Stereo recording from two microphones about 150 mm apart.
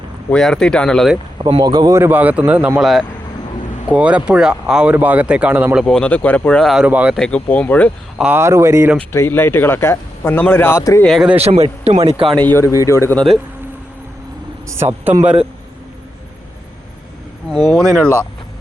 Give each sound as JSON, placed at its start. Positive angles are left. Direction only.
{"t": 0.3, "sound": "speech", "side_deg": 5}
{"t": 1.4, "sound": "speech", "side_deg": -35}
{"t": 2.0, "sound": "speech", "side_deg": -10}
{"t": 5.8, "sound": "speech", "side_deg": 5}
{"t": 7.2, "sound": "a man's voice", "side_deg": 10}
{"t": 8.2, "sound": "speech", "side_deg": -15}
{"t": 9.0, "sound": "a man's voice", "side_deg": 15}
{"t": 11.0, "sound": "speech", "side_deg": 0}
{"t": 11.3, "sound": "speech", "side_deg": -45}
{"t": 12.4, "sound": "a man's voice", "side_deg": 15}
{"t": 14.8, "sound": "speech", "side_deg": -15}